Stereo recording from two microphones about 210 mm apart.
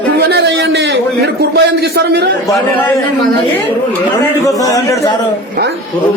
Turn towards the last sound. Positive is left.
turn(degrees=15)  # may be behind; listen again after turning